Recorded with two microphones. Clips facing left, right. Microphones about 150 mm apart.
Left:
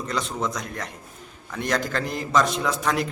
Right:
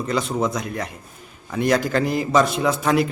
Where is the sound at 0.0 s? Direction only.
5° right (ahead or behind).